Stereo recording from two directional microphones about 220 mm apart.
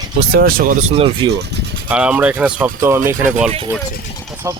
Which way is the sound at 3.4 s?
30° right (ahead or behind).